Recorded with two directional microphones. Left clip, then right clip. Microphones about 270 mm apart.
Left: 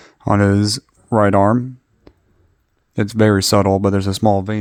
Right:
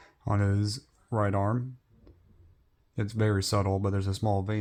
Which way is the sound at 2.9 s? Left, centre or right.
Left.